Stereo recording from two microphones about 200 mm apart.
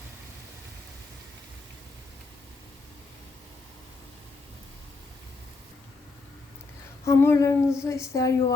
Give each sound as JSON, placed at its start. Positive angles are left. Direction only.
{"t": 7.0, "sound": "speech", "side_deg": 15}